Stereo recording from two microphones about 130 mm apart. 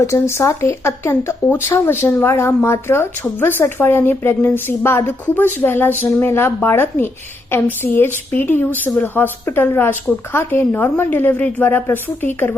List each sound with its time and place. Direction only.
0.0 s speech: 20° left (ahead or behind)